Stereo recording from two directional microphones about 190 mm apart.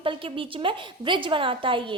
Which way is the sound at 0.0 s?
30° right (ahead or behind).